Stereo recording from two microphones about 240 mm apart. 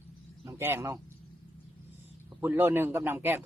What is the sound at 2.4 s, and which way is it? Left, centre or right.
A man's voice, centre.